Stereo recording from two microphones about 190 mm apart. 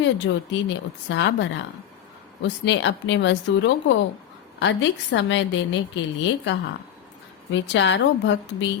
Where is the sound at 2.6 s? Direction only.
70° left (ahead or behind).